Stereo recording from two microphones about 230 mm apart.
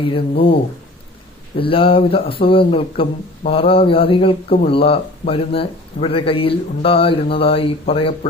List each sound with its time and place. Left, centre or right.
0.0 s a man's voice: left
1.5 s a man's voice: left